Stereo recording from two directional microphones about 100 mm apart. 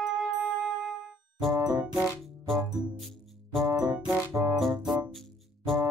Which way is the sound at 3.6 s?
35° right (ahead or behind).